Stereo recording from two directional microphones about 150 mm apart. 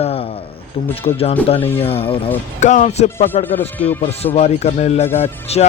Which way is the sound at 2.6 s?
50° left (ahead or behind).